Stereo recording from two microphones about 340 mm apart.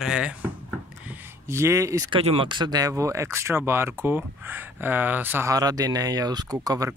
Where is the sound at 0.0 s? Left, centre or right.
Centre.